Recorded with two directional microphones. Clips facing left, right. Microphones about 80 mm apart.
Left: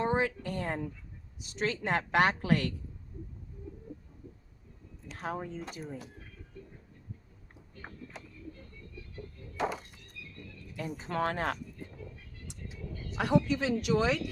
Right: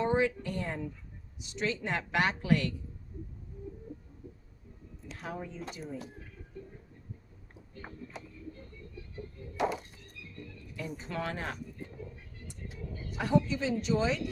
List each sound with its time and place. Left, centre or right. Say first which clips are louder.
0.0 s a woman's voice: right 1 dB; left
5.1 s speech: left 3 dB; left
10.0 s music: right 1 dB; right
10.8 s a woman's voice: left 4 dB; left
13.1 s speech: left 1 dB; left